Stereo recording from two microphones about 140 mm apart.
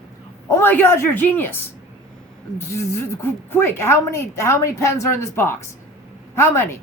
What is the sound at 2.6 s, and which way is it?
A woman's voice, 15° left (ahead or behind).